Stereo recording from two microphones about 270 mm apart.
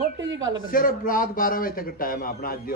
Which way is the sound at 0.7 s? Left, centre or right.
Left.